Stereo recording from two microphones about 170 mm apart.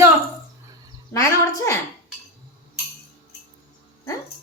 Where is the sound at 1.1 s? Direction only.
20° left (ahead or behind).